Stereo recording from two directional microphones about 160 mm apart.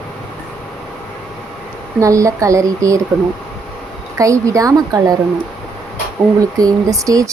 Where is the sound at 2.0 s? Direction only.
20° right (ahead or behind).